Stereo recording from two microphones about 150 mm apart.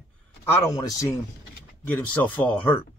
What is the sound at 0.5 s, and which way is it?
Speech, 20° left (ahead or behind).